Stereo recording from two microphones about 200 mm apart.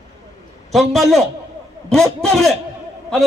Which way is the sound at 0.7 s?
Centre (ahead or behind).